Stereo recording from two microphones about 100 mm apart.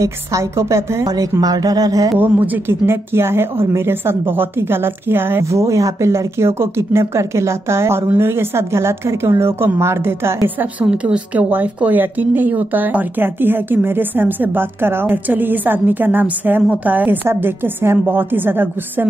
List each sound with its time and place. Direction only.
0.0 s a woman's voice: 30° right (ahead or behind)
1.4 s a woman's voice: 40° right (ahead or behind)
2.1 s a woman's voice: 20° right (ahead or behind)